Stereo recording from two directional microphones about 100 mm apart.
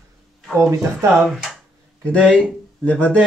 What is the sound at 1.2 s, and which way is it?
Speech, centre (ahead or behind).